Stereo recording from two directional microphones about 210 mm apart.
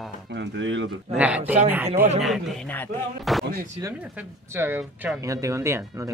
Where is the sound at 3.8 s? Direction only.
5° right (ahead or behind).